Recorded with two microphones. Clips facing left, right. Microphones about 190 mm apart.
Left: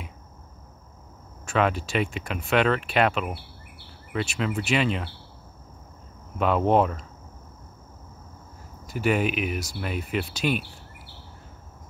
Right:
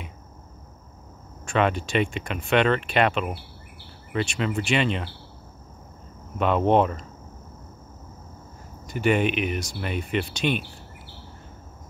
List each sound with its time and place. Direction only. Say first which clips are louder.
1.4 s speech: right 1 dB; 5° left (ahead or behind)
6.3 s speech: right 1 dB; 5° left (ahead or behind)
8.8 s speech: right 2 dB; 5° left (ahead or behind)